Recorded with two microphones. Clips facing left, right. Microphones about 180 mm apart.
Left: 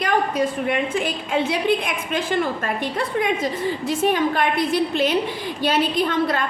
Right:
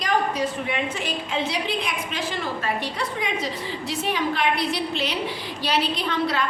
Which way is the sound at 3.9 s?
50° left (ahead or behind).